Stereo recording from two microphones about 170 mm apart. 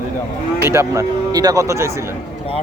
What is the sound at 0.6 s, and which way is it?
Speech, 15° right (ahead or behind).